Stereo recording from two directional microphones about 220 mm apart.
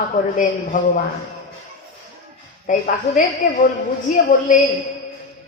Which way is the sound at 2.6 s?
35° left (ahead or behind).